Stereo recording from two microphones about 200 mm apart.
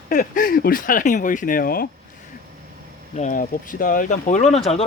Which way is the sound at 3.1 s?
40° left (ahead or behind).